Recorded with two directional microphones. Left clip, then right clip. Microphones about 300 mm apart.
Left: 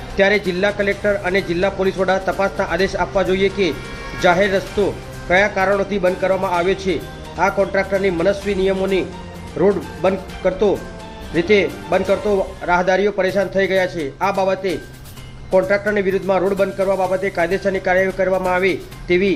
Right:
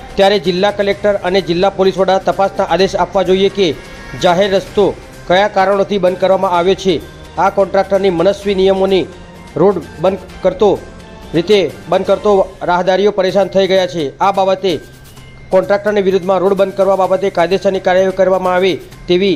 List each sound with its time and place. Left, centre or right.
0.2 s speech: right